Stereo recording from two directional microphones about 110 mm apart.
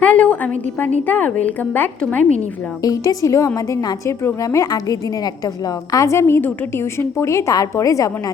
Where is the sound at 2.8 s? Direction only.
30° left (ahead or behind).